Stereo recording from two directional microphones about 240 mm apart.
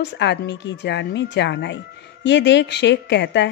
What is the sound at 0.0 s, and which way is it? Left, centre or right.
A woman's voice, left.